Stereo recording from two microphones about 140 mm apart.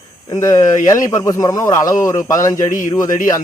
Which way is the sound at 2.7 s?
65° left (ahead or behind).